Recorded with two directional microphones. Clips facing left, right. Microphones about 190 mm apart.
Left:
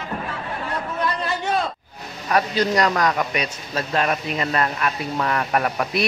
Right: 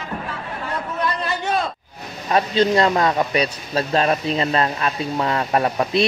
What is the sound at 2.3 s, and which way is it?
A man's voice, 25° right (ahead or behind).